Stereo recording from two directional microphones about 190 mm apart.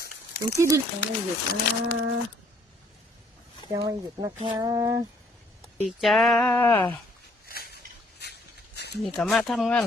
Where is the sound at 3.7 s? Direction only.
20° right (ahead or behind).